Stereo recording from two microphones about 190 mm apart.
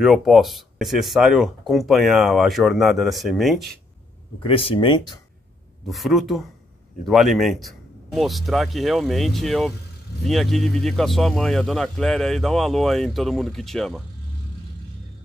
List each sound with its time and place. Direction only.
0.0 s speech: centre (ahead or behind)
4.4 s speech: 30° left (ahead or behind)
5.9 s speech: centre (ahead or behind)